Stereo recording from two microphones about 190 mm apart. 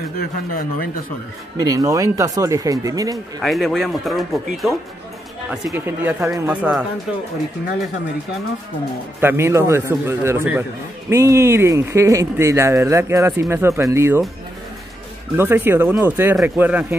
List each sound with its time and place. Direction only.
0.2 s speech: 50° left (ahead or behind)
1.6 s speech: 20° right (ahead or behind)
3.4 s speech: centre (ahead or behind)
5.7 s speech: 10° right (ahead or behind)
9.2 s speech: 15° right (ahead or behind)
15.3 s speech: 10° right (ahead or behind)